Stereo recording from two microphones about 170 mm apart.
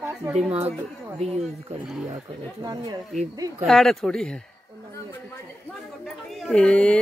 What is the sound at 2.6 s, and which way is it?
Speech, 25° right (ahead or behind).